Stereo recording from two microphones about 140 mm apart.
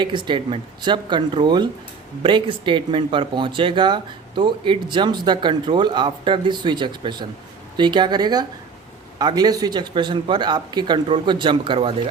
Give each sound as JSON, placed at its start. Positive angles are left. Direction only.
{"t": 0.0, "sound": "speech", "side_deg": -35}